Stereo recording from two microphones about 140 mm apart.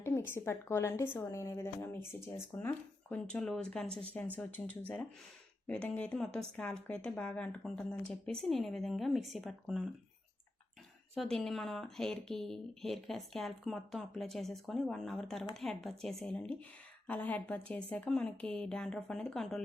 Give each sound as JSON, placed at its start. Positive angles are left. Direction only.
{"t": 0.0, "sound": "a woman's voice", "side_deg": 15}
{"t": 11.1, "sound": "a woman's voice", "side_deg": 5}